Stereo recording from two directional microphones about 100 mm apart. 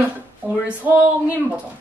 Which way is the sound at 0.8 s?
20° right (ahead or behind).